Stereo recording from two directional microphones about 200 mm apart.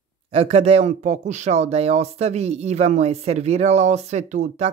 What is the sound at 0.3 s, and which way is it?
Speech, 30° right (ahead or behind).